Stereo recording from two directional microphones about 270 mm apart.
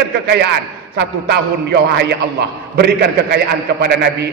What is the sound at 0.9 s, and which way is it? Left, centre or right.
A man's voice, right.